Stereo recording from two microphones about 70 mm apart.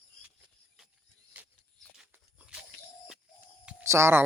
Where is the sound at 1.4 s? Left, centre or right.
Right.